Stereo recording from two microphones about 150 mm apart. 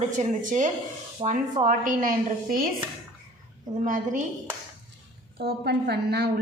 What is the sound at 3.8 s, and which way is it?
Speech, 60° right (ahead or behind).